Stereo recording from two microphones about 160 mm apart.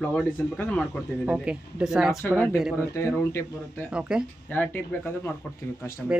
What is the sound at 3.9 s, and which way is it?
Speech, 5° right (ahead or behind).